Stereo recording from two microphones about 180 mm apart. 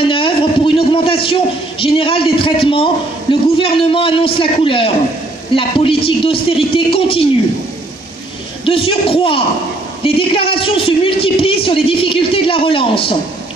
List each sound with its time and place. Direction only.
0.0 s a man's voice: 30° left (ahead or behind)
8.6 s a man's voice: 30° left (ahead or behind)